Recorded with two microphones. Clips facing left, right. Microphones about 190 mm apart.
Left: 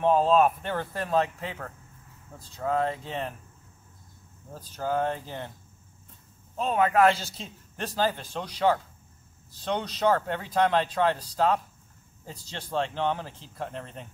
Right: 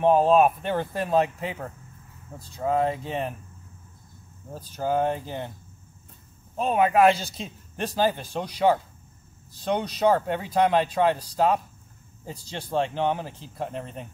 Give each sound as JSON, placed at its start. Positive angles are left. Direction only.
{"t": 0.0, "sound": "a man's voice", "side_deg": -15}
{"t": 4.5, "sound": "a man's voice", "side_deg": -15}
{"t": 6.5, "sound": "a man's voice", "side_deg": -15}